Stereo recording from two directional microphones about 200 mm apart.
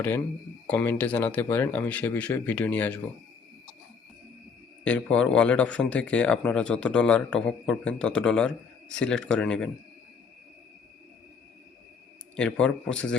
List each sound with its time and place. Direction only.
0.7 s speech: 5° left (ahead or behind)
4.8 s speech: 5° left (ahead or behind)
12.4 s speech: 5° left (ahead or behind)